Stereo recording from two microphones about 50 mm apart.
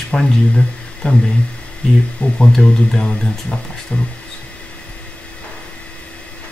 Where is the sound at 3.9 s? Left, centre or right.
Left.